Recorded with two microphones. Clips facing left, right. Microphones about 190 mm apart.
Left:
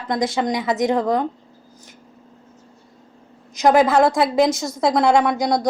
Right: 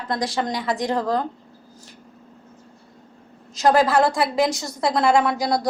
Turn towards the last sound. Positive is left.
turn(degrees=20)  # may be behind; listen again after turning